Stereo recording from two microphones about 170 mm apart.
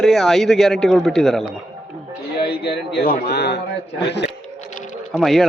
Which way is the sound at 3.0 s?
65° left (ahead or behind).